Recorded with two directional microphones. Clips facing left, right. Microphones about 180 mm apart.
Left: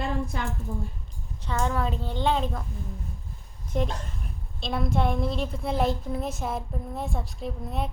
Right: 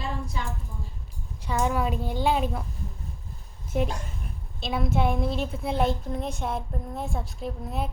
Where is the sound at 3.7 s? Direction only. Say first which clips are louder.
Right 1 dB; 5° right (ahead or behind).